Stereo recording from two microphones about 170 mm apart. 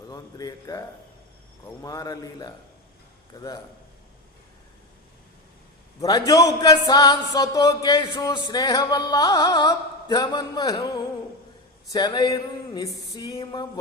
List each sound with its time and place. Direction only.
0.1 s a man's voice: 20° left (ahead or behind)
6.0 s speech: 20° left (ahead or behind)